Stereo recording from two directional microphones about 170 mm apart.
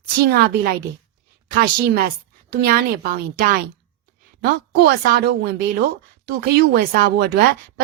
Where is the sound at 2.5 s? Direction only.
60° right (ahead or behind).